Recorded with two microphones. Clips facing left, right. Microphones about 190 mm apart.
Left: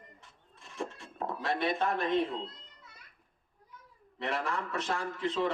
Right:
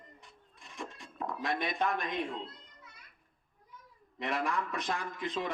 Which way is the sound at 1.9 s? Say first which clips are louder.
Left 7 dB; 15° right (ahead or behind).